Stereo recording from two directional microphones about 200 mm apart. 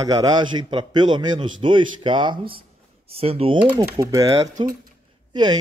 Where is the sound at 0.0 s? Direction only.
20° right (ahead or behind).